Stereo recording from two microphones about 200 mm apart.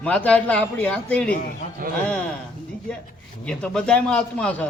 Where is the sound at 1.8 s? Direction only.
45° right (ahead or behind).